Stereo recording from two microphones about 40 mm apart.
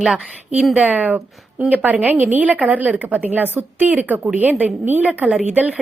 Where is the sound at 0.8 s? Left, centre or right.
Right.